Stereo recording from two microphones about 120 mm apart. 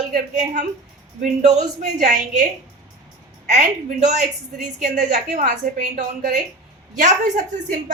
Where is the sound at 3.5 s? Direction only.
85° right.